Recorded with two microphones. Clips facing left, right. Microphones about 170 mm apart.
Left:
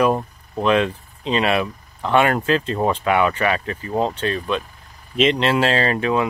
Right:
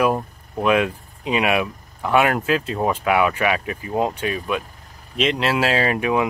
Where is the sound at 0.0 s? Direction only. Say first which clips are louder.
Left 1 dB; 5° right (ahead or behind).